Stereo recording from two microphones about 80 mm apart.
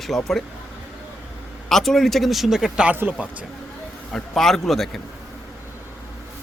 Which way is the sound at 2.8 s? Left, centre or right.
Right.